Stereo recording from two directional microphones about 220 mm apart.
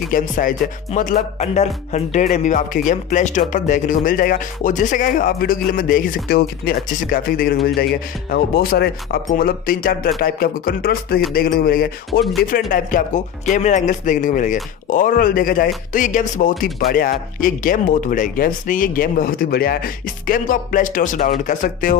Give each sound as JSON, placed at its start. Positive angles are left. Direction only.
{"t": 0.1, "sound": "speech", "side_deg": 40}